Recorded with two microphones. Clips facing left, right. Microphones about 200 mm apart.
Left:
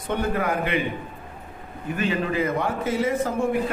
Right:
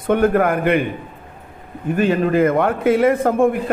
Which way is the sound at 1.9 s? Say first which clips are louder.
Right 8 dB; 50° right (ahead or behind).